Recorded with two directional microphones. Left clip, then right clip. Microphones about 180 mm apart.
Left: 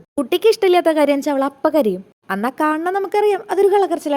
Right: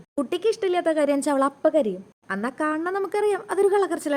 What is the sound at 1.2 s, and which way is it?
Speech, 5° left (ahead or behind).